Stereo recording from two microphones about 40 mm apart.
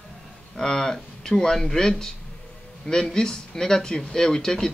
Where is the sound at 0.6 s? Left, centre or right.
Centre.